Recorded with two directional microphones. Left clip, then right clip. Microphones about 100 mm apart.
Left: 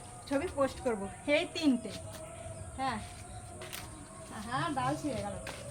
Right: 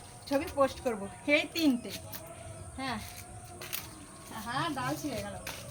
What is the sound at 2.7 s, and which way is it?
Speech, 25° left (ahead or behind).